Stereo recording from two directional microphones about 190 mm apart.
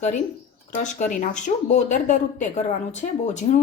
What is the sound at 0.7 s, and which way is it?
Speech, 40° left (ahead or behind).